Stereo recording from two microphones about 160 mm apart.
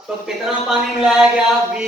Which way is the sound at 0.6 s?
5° right (ahead or behind).